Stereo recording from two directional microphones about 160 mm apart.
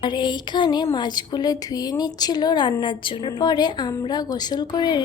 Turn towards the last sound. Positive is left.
turn(degrees=25)  # may be behind; listen again after turning